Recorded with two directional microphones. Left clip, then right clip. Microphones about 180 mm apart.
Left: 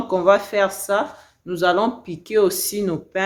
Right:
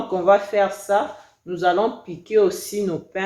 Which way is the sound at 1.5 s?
50° left (ahead or behind).